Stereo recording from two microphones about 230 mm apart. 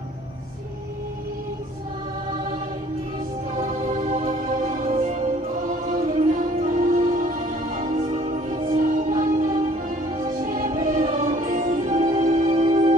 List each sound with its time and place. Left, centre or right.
3.5 s music: right